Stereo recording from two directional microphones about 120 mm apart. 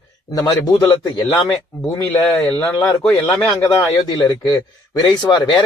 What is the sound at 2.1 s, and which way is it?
A man's voice, 15° left (ahead or behind).